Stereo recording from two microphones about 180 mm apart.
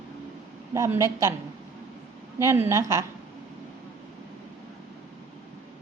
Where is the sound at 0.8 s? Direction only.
15° right (ahead or behind).